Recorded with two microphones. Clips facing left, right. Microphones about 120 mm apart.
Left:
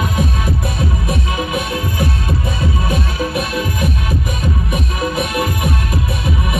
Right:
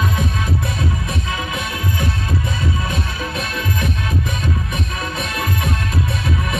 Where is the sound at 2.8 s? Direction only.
15° left (ahead or behind).